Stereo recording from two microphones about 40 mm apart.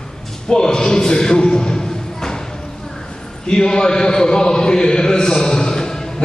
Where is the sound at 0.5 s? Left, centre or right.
Centre.